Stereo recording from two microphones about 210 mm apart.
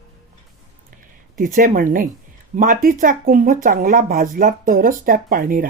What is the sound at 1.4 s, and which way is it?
Speech, 40° right (ahead or behind).